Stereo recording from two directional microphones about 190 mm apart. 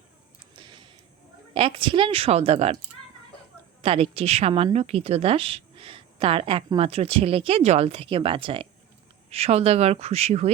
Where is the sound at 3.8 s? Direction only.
30° right (ahead or behind).